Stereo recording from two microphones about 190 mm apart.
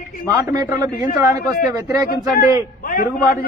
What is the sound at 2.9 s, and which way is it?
Speech, 55° left (ahead or behind).